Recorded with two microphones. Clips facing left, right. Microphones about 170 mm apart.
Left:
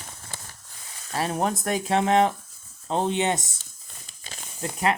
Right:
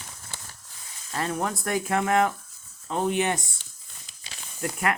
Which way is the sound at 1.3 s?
20° left (ahead or behind).